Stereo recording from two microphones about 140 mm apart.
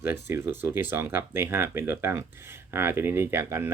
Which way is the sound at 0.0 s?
15° right (ahead or behind).